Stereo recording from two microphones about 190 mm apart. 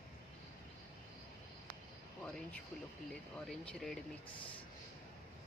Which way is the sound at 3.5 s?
Centre (ahead or behind).